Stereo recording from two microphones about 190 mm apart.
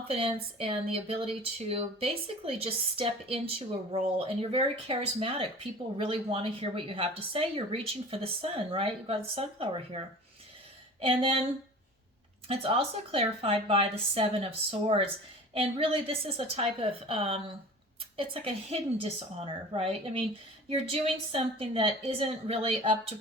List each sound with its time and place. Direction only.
0.1 s a woman's voice: 30° right (ahead or behind)
11.0 s a woman's voice: 30° right (ahead or behind)
12.5 s a woman's voice: 30° right (ahead or behind)